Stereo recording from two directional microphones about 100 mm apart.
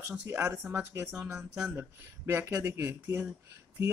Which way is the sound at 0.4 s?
20° right (ahead or behind).